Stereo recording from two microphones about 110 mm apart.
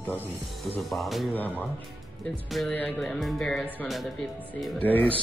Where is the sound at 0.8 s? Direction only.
Centre (ahead or behind).